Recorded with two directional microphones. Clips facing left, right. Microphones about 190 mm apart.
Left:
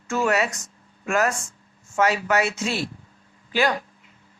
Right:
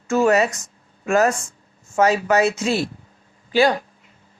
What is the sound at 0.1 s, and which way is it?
Speech, 40° right (ahead or behind).